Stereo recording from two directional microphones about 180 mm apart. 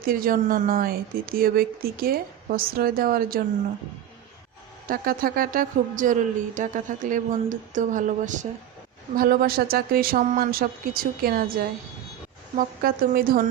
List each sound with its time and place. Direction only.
0.0 s a woman's voice: 55° right (ahead or behind)
4.9 s a woman's voice: 55° right (ahead or behind)
12.5 s speech: 55° right (ahead or behind)